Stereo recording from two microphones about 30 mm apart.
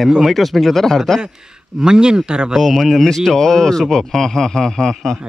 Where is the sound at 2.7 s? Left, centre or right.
Centre.